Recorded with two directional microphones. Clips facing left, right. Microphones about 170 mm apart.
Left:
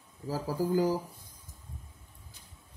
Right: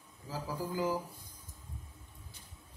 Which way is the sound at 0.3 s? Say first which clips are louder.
Left 8 dB; 40° left (ahead or behind).